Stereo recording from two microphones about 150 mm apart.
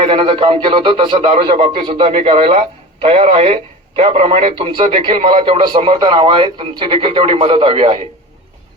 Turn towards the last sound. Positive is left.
turn(degrees=-40)  # may be behind; listen again after turning